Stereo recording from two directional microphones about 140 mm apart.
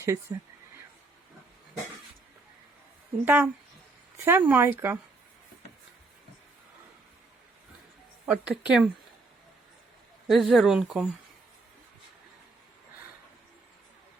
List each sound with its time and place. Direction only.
0.0 s speech: 20° right (ahead or behind)
3.2 s speech: 10° right (ahead or behind)
8.3 s speech: 5° right (ahead or behind)
10.2 s speech: centre (ahead or behind)